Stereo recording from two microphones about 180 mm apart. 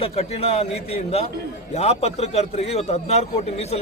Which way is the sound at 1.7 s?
35° left (ahead or behind).